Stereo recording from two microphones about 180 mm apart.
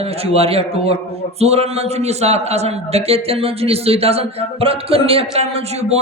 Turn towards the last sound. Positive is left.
turn(degrees=-35)  # may be behind; listen again after turning